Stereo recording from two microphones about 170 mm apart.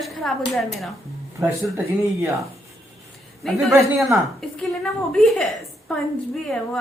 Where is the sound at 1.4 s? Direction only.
15° right (ahead or behind).